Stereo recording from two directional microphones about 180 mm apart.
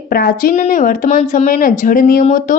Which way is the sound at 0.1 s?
55° left (ahead or behind).